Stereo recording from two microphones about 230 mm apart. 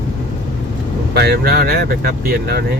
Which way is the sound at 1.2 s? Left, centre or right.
Right.